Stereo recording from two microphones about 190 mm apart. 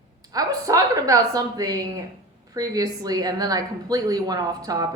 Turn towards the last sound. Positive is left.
turn(degrees=-20)  # may be behind; listen again after turning